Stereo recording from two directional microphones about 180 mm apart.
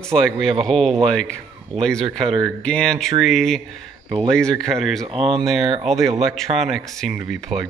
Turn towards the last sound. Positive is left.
turn(degrees=0)  # may be behind; listen again after turning